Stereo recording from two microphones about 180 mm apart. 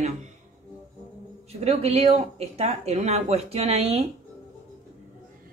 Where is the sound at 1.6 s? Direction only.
35° right (ahead or behind).